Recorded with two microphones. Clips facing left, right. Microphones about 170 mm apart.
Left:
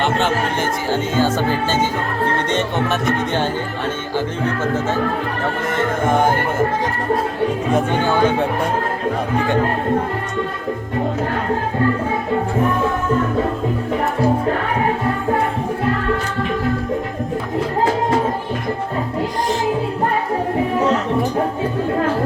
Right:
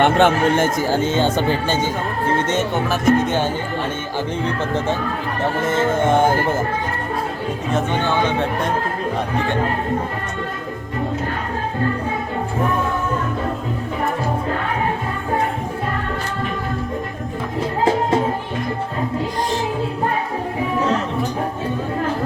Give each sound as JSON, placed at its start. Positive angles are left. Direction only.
{"t": 0.0, "sound": "speech", "side_deg": -55}
{"t": 1.1, "sound": "music", "side_deg": -20}
{"t": 2.6, "sound": "music", "side_deg": 0}
{"t": 5.6, "sound": "music", "side_deg": -25}